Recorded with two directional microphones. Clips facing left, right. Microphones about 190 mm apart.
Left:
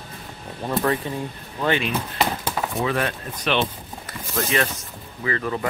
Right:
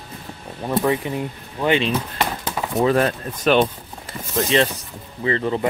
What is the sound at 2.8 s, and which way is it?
Speech, 35° right (ahead or behind).